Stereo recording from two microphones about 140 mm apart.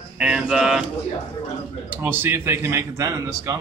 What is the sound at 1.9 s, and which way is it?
Speech, 15° right (ahead or behind).